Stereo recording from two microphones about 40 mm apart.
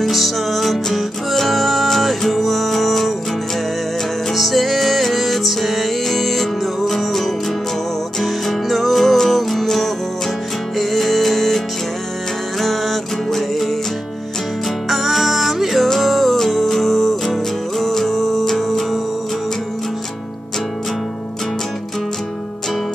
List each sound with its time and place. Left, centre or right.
0.0 s music: centre
4.3 s music: centre
14.9 s music: centre